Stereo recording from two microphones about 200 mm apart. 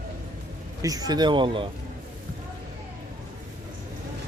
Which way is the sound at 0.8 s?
20° right (ahead or behind).